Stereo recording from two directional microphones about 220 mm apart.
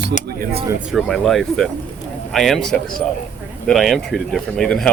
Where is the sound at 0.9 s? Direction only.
Centre (ahead or behind).